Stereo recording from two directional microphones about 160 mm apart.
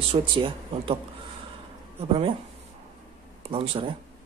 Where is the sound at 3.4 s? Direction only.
35° right (ahead or behind).